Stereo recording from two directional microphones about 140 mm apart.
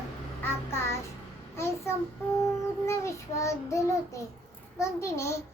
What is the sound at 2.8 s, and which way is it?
A child's voice, 20° left (ahead or behind).